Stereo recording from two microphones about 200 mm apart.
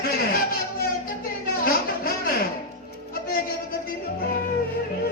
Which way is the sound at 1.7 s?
45° left (ahead or behind).